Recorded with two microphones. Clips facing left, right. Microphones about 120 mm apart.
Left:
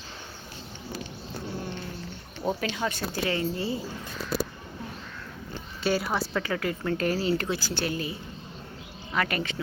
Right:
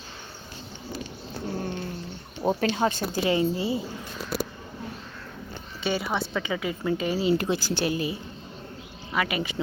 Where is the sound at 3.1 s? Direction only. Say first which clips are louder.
Right 4 dB; 20° right (ahead or behind).